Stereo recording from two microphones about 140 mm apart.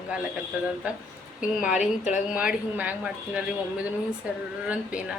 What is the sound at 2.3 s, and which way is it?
Speech, 10° right (ahead or behind).